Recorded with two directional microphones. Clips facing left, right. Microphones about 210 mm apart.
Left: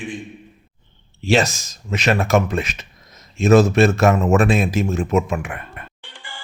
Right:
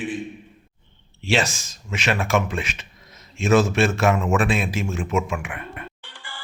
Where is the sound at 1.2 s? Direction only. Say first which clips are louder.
Left 5 dB; 40° left (ahead or behind).